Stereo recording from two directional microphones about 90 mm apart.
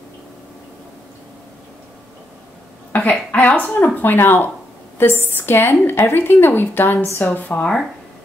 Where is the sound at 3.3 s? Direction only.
20° left (ahead or behind).